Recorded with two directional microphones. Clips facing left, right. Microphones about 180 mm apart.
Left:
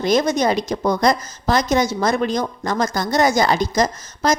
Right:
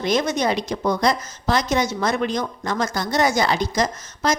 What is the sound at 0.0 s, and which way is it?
Speech, 40° left (ahead or behind).